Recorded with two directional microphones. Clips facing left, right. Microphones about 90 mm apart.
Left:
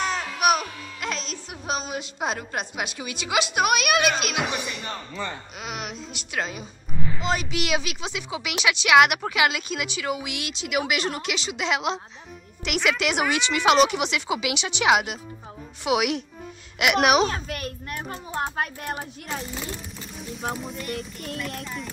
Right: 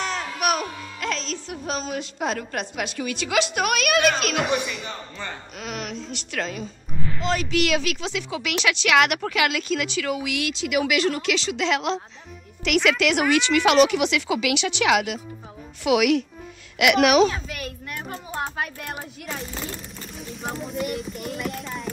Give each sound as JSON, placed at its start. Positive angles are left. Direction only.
{"t": 0.4, "sound": "a sound", "side_deg": 10}
{"t": 1.0, "sound": "a woman's voice", "side_deg": 15}
{"t": 17.3, "sound": "a child's voice", "side_deg": 50}
{"t": 19.2, "sound": "speech", "side_deg": 0}